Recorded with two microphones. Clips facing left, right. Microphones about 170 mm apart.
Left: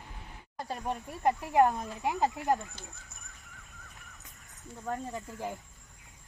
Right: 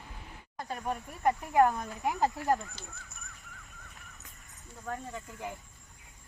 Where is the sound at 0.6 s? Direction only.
30° left (ahead or behind).